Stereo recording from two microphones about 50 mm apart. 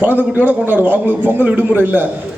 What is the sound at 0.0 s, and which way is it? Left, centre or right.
A man's voice, right.